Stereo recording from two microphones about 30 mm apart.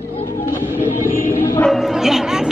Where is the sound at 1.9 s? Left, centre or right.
Centre.